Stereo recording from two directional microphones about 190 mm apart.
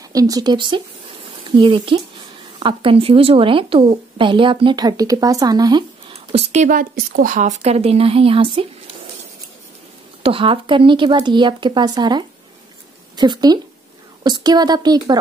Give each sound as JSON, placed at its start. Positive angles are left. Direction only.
{"t": 0.1, "sound": "speech", "side_deg": -20}
{"t": 10.2, "sound": "speech", "side_deg": -30}